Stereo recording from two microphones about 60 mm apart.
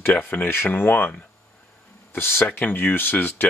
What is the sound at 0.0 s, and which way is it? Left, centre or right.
Speech, left.